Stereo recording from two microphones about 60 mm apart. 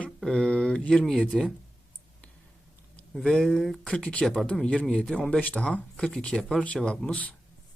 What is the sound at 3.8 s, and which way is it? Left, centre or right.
A man's voice, centre.